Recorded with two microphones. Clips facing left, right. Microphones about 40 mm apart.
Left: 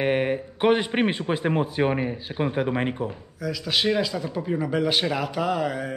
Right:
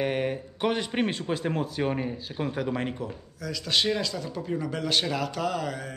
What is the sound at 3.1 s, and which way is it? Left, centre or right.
Speech, centre.